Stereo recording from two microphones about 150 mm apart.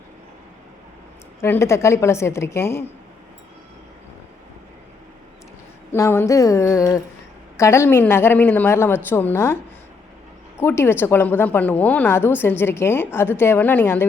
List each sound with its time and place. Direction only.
1.4 s a woman's voice: 15° left (ahead or behind)
5.9 s a woman's voice: 15° left (ahead or behind)
10.6 s a woman's voice: 15° left (ahead or behind)